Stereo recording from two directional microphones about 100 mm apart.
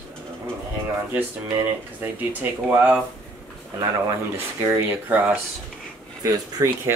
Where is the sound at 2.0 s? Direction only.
20° right (ahead or behind).